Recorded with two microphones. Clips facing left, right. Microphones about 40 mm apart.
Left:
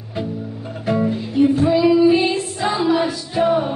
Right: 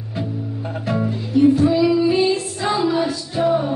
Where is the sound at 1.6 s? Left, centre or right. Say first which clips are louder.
Left 2 dB; left.